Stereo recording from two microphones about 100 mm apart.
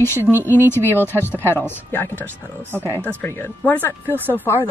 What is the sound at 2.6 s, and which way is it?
Speech, 20° right (ahead or behind).